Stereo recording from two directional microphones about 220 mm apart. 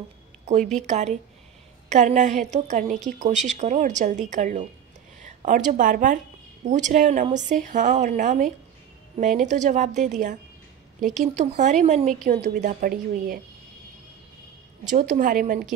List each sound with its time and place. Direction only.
0.5 s a woman's voice: 35° right (ahead or behind)
14.9 s a woman's voice: 35° right (ahead or behind)